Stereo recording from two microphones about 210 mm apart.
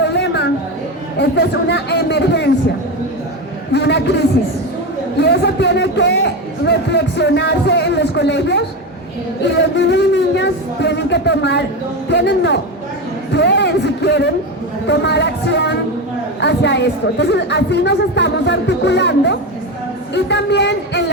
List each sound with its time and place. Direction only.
0.0 s a sound: 55° left (ahead or behind)
1.2 s speech: 55° left (ahead or behind)
3.7 s speech: 55° left (ahead or behind)
5.1 s music: 55° left (ahead or behind)
9.4 s a sound: 55° left (ahead or behind)
12.0 s a woman's voice: 55° left (ahead or behind)
13.3 s a sound: 55° left (ahead or behind)
14.8 s music: 55° left (ahead or behind)
16.4 s a woman's voice: 55° left (ahead or behind)